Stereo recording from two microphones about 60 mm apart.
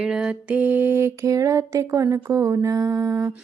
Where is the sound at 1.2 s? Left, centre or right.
Right.